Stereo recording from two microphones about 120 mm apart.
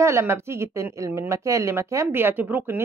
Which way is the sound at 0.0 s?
20° right (ahead or behind).